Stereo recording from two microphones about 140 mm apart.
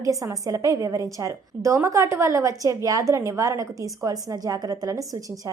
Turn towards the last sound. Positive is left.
turn(degrees=-25)  # may be behind; listen again after turning